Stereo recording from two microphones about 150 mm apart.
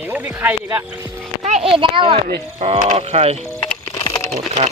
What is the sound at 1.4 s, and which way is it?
Speech, 45° right (ahead or behind).